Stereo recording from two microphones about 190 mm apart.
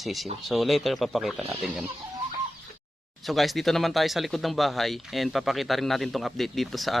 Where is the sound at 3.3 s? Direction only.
Centre (ahead or behind).